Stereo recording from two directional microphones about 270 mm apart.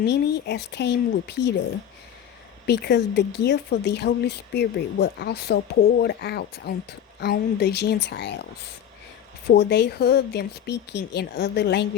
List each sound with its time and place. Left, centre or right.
0.0 s speech: left
2.6 s speech: left
9.5 s speech: left